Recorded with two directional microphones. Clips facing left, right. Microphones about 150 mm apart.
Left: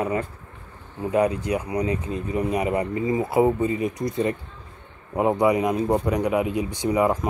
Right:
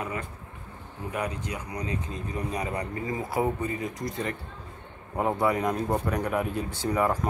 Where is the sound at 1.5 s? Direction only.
20° left (ahead or behind).